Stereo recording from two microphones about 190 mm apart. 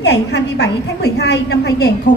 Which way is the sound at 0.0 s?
60° left (ahead or behind).